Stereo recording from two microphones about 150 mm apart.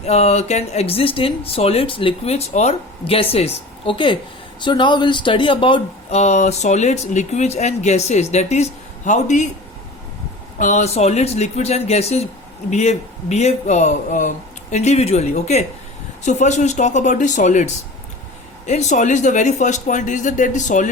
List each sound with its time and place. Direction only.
0.0 s speech: 45° left (ahead or behind)
6.1 s speech: 50° left (ahead or behind)
10.6 s speech: 55° left (ahead or behind)